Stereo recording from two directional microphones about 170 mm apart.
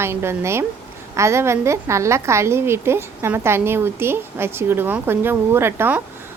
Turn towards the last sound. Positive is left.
turn(degrees=-15)  # may be behind; listen again after turning